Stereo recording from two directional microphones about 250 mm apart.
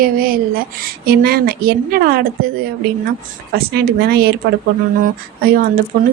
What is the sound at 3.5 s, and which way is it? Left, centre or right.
Speech, right.